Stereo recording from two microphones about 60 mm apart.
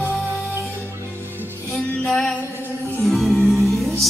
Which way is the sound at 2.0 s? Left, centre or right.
Centre.